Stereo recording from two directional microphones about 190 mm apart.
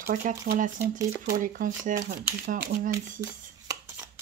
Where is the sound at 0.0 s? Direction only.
45° right (ahead or behind).